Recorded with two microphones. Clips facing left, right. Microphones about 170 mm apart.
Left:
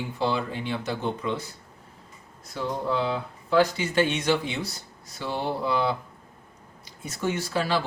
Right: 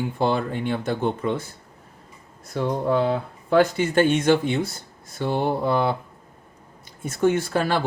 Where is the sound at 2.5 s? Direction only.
50° right (ahead or behind).